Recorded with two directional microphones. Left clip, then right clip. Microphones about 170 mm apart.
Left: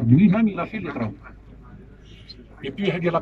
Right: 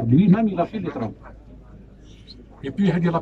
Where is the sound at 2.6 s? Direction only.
25° right (ahead or behind).